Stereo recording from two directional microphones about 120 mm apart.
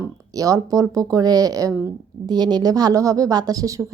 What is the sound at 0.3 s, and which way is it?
A woman's voice, 30° right (ahead or behind).